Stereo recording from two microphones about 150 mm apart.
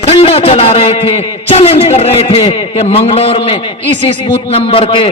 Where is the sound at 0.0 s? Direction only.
40° left (ahead or behind).